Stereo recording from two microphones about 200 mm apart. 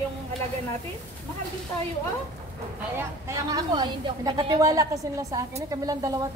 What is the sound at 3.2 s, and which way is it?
A woman's voice, 20° right (ahead or behind).